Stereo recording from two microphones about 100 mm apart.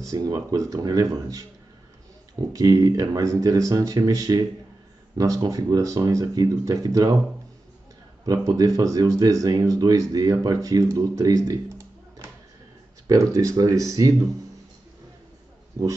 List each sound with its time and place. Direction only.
0.0 s speech: 35° right (ahead or behind)
2.5 s speech: 35° right (ahead or behind)
8.3 s speech: 35° right (ahead or behind)
13.0 s speech: 35° right (ahead or behind)